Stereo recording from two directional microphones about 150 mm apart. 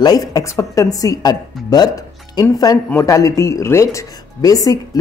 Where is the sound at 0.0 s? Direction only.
25° left (ahead or behind).